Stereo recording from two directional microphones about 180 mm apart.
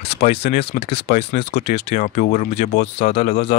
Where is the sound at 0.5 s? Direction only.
65° left (ahead or behind).